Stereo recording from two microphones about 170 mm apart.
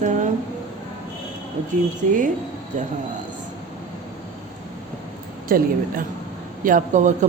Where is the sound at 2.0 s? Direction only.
55° right (ahead or behind).